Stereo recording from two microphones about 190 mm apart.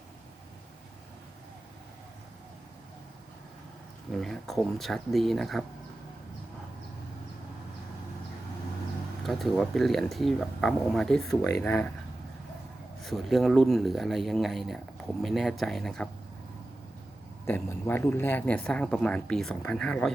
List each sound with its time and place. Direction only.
4.1 s speech: centre (ahead or behind)
9.2 s speech: centre (ahead or behind)
13.0 s speech: centre (ahead or behind)
17.4 s speech: 10° left (ahead or behind)